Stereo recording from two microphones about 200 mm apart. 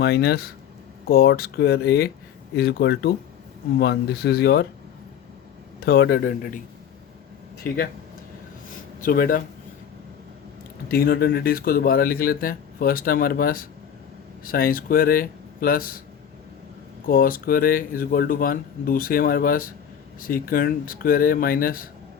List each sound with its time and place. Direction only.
0.0 s speech: 55° left (ahead or behind)
5.8 s speech: 50° left (ahead or behind)
8.7 s a sound: 45° left (ahead or behind)
10.8 s speech: 50° left (ahead or behind)
17.1 s speech: 45° left (ahead or behind)